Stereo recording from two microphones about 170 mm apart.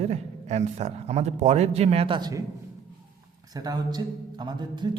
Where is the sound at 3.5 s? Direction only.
20° right (ahead or behind).